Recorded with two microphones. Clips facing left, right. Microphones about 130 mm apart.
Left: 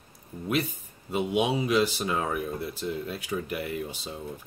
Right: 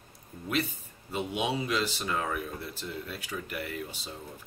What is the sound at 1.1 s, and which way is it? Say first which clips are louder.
Speech: left 5 dB; 15° left (ahead or behind).